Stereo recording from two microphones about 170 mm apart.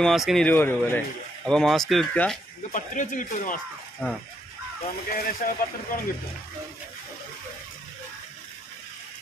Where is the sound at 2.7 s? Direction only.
50° left (ahead or behind).